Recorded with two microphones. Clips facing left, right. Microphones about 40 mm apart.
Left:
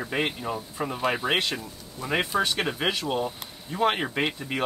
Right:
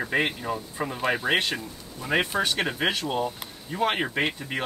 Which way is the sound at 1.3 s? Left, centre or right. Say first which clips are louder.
Right 1 dB; centre.